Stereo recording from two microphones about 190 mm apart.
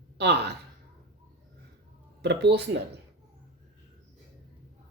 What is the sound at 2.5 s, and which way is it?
Speech, 65° right (ahead or behind).